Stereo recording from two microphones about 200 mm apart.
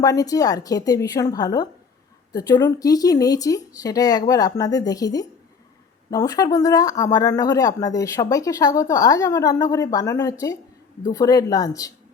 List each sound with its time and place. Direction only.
0.0 s a woman's voice: 20° left (ahead or behind)